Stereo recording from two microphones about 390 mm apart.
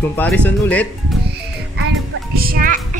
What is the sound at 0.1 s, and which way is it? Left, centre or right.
Speech, centre.